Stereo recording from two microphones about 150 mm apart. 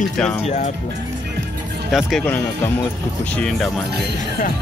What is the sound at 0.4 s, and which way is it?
Speech, 45° left (ahead or behind).